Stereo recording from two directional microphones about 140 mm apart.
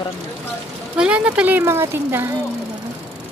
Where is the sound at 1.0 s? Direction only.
10° right (ahead or behind).